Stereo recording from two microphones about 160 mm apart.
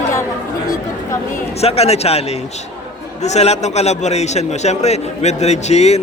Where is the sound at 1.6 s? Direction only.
40° left (ahead or behind).